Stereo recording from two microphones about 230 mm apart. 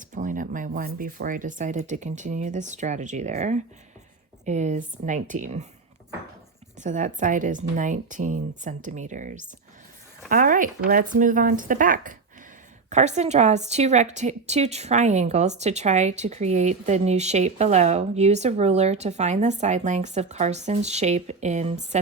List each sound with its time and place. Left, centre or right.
0.0 s speech: right
6.8 s a woman's voice: right